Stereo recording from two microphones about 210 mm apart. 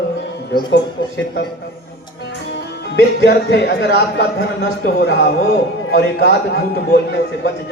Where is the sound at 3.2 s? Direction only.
50° left (ahead or behind).